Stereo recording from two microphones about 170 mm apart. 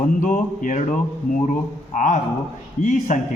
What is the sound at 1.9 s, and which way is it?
A man's voice, 50° left (ahead or behind).